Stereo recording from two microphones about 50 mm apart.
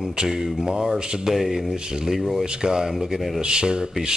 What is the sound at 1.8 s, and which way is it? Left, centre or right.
Speech, centre.